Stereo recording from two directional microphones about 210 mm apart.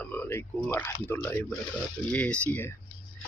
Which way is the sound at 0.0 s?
10° left (ahead or behind).